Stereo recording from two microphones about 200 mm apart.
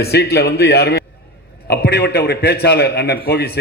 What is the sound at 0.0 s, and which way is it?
A man's voice, 55° left (ahead or behind).